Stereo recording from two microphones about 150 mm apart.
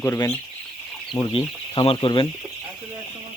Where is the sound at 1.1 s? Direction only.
35° left (ahead or behind).